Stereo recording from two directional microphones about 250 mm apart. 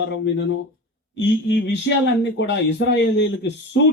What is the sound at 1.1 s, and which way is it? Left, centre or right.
Speech, left.